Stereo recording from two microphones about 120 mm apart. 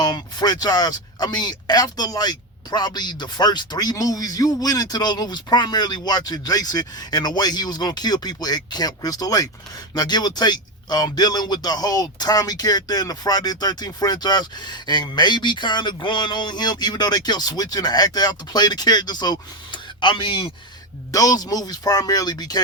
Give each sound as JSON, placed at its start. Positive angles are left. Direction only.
{"t": 0.0, "sound": "speech", "side_deg": 35}
{"t": 21.1, "sound": "speech", "side_deg": 30}